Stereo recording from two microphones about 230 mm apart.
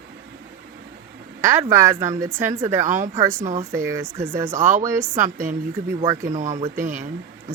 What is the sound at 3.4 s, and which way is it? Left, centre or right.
Speech, right.